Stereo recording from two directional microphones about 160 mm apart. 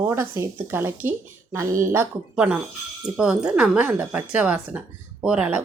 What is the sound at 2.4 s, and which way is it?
Speech, 10° right (ahead or behind).